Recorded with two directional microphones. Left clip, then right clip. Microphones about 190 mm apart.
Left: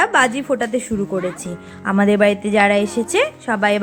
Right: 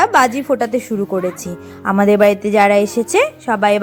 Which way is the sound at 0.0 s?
25° right (ahead or behind).